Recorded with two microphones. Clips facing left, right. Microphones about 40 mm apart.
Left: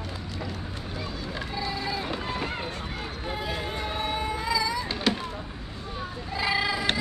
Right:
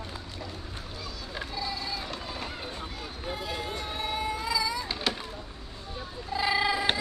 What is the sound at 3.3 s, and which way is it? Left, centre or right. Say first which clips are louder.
Music: left 2 dB; centre.